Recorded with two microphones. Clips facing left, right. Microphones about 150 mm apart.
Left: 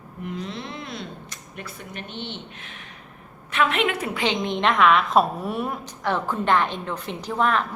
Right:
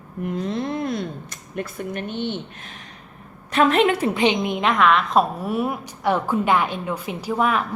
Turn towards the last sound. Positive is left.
turn(degrees=-5)  # may be behind; listen again after turning